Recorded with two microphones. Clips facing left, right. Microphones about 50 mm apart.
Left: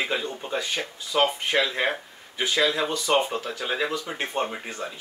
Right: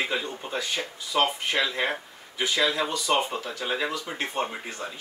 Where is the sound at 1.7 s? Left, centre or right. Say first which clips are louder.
Left 2 dB; left.